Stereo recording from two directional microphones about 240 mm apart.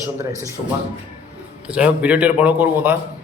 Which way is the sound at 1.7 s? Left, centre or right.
Centre.